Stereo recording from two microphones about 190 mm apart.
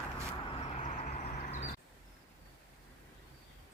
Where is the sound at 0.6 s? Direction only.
35° left (ahead or behind).